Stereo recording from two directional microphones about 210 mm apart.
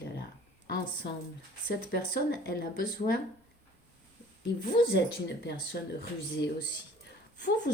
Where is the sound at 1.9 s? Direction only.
45° left (ahead or behind).